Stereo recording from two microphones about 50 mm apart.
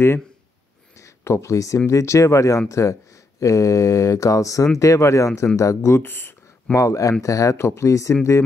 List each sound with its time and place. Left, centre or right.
1.0 s speech: left
6.7 s speech: left